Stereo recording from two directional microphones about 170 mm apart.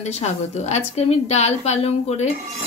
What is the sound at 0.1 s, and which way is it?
A woman's voice, 40° left (ahead or behind).